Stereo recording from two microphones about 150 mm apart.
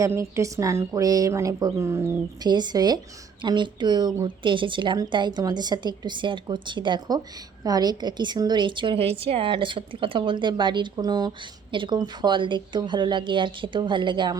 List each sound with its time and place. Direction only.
0.0 s a woman's voice: 20° right (ahead or behind)